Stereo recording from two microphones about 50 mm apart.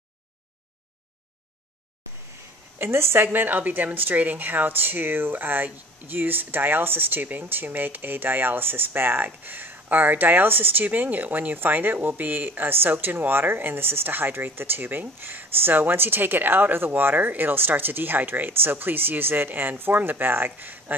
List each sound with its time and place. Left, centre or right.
2.8 s speech: right
3.3 s a woman's voice: right